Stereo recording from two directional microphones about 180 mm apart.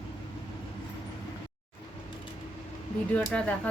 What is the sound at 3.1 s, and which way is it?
Speech, 5° left (ahead or behind).